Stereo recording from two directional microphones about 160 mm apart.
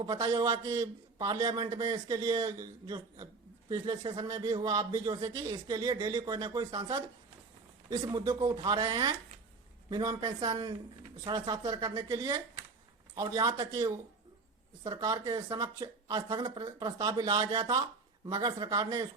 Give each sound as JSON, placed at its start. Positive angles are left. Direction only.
{"t": 0.0, "sound": "a man's voice", "side_deg": -25}